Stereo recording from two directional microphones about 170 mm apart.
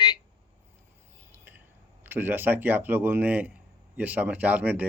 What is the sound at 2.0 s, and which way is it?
Speech, 10° right (ahead or behind).